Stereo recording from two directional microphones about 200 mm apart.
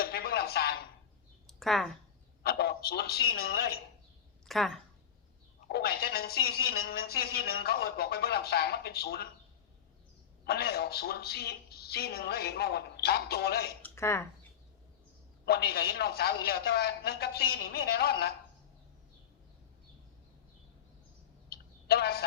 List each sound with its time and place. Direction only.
0.0 s a sound: 50° left (ahead or behind)
1.5 s a sound: centre (ahead or behind)
2.4 s a woman's voice: 50° left (ahead or behind)
4.4 s a woman's voice: centre (ahead or behind)
5.5 s a woman's voice: 50° left (ahead or behind)
10.4 s a woman's voice: 50° left (ahead or behind)
13.8 s speech: 15° left (ahead or behind)
15.4 s a woman's voice: 50° left (ahead or behind)
21.5 s a sound: 50° left (ahead or behind)